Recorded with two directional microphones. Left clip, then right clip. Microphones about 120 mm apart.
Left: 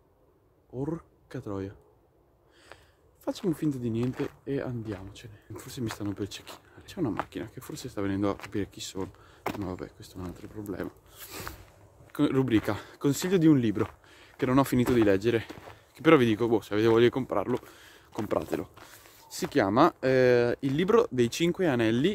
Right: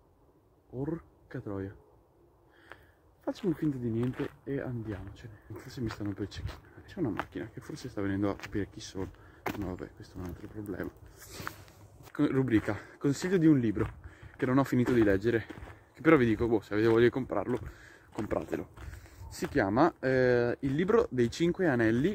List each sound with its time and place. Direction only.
0.7 s speech: 15° left (ahead or behind)
2.7 s a sound: 15° left (ahead or behind)
3.3 s speech: 10° left (ahead or behind)
12.1 s speech: 15° left (ahead or behind)
17.6 s a sound: 20° left (ahead or behind)
18.3 s speech: 35° left (ahead or behind); by 22.0 s centre (ahead or behind)